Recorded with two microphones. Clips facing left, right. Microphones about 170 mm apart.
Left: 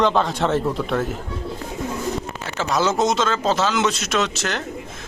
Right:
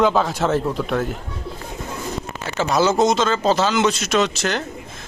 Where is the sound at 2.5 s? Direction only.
5° right (ahead or behind).